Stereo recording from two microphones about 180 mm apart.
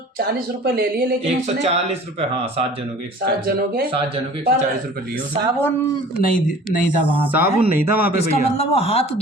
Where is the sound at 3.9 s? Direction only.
30° right (ahead or behind).